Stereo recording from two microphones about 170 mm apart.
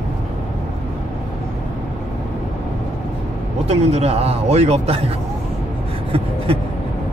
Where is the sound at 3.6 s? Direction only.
35° right (ahead or behind).